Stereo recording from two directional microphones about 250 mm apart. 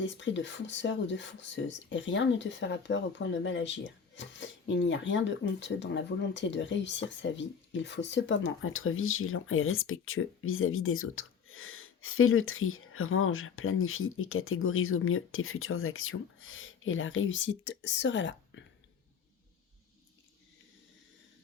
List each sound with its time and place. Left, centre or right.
0.0 s speech: left